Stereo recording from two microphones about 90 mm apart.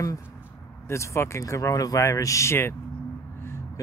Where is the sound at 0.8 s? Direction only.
30° left (ahead or behind).